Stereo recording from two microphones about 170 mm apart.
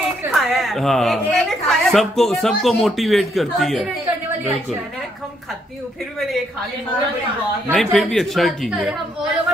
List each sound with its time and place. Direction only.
0.3 s a woman's voice: centre (ahead or behind)
7.7 s a woman's voice: centre (ahead or behind)